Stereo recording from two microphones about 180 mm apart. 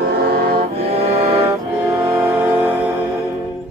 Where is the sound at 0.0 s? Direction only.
60° right (ahead or behind).